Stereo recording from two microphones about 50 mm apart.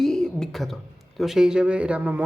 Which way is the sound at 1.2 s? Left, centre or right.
Centre.